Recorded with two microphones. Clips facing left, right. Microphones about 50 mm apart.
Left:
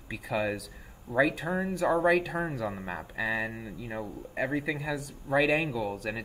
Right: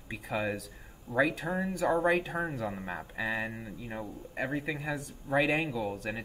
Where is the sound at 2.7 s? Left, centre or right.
Centre.